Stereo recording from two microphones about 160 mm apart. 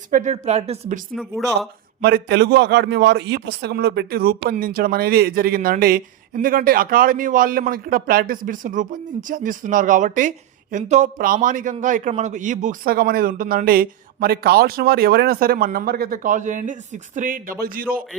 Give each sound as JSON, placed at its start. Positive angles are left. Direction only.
{"t": 0.1, "sound": "a woman's voice", "side_deg": -50}
{"t": 1.1, "sound": "speech", "side_deg": 0}
{"t": 2.0, "sound": "a man's voice", "side_deg": -70}